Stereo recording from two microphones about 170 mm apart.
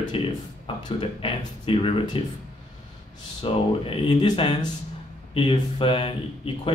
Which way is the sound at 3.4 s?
30° left (ahead or behind).